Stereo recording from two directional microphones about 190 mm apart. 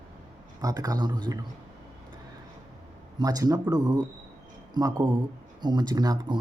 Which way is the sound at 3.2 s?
20° right (ahead or behind).